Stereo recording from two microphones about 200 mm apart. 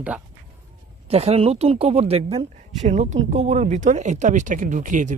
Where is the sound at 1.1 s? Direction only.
30° right (ahead or behind).